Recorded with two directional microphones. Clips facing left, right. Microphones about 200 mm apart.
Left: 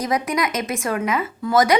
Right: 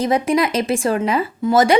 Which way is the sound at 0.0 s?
30° right (ahead or behind).